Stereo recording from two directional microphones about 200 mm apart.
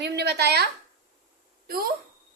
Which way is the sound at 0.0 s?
55° right (ahead or behind).